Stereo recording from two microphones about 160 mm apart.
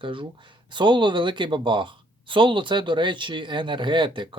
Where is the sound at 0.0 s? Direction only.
30° right (ahead or behind).